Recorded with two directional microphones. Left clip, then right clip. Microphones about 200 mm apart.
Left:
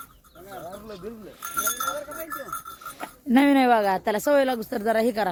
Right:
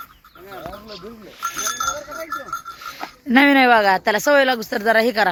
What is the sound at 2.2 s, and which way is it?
Speech, 25° left (ahead or behind).